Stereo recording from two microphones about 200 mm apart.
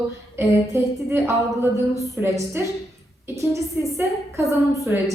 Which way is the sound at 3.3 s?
15° right (ahead or behind).